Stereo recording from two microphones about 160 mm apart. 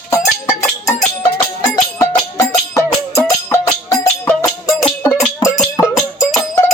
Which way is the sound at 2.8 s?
15° left (ahead or behind).